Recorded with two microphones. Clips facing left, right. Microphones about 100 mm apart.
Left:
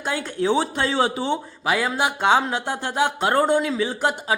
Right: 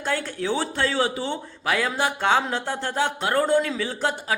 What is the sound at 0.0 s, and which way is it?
Speech, 15° left (ahead or behind).